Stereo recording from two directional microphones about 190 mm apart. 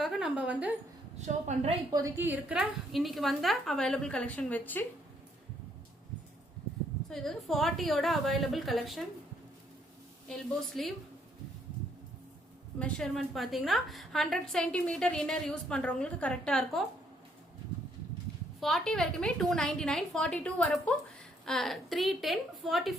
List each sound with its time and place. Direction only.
0.0 s a woman's voice: centre (ahead or behind)
1.2 s speech: 35° right (ahead or behind)
1.9 s a woman's voice: 15° right (ahead or behind); by 4.9 s 10° left (ahead or behind)
7.1 s a woman's voice: centre (ahead or behind)
10.2 s a woman's voice: centre (ahead or behind)
12.8 s a woman's voice: centre (ahead or behind)
18.6 s a woman's voice: centre (ahead or behind)